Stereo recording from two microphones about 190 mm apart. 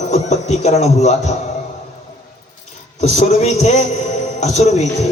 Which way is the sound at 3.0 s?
35° left (ahead or behind).